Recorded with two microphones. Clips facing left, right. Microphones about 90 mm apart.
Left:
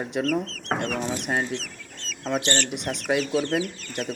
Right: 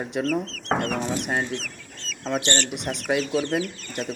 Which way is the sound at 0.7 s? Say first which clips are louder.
Right 2 dB; 50° right (ahead or behind).